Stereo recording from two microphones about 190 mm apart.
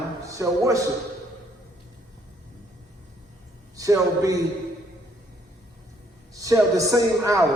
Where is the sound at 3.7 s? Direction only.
15° right (ahead or behind).